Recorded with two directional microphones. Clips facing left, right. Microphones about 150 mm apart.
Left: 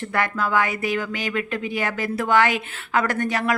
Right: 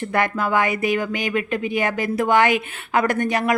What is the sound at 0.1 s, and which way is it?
Speech, 15° right (ahead or behind).